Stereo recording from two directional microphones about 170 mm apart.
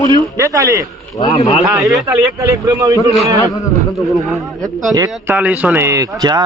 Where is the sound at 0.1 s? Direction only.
20° right (ahead or behind).